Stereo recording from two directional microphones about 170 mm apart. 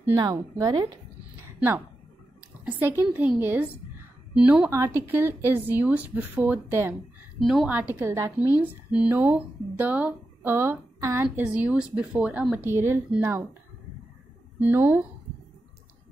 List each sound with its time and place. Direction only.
0.0 s speech: 20° right (ahead or behind)
2.6 s speech: 10° right (ahead or behind)
7.3 s a woman's voice: centre (ahead or behind)
7.9 s speech: 15° right (ahead or behind)
14.6 s speech: 10° right (ahead or behind)